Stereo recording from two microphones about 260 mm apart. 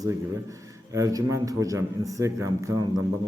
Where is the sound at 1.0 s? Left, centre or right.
Centre.